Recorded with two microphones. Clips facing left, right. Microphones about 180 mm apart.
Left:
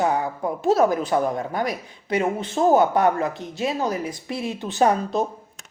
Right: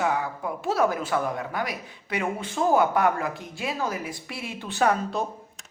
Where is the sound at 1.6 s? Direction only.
40° left (ahead or behind).